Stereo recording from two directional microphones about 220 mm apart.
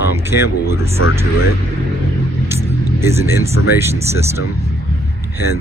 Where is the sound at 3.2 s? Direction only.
10° right (ahead or behind).